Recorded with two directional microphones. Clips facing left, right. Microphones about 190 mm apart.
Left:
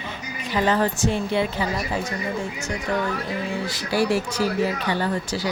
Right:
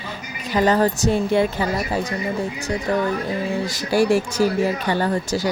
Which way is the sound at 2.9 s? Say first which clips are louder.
Right 4 dB; 40° right (ahead or behind).